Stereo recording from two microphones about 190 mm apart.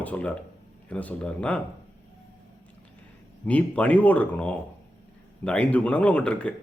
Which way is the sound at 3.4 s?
5° left (ahead or behind).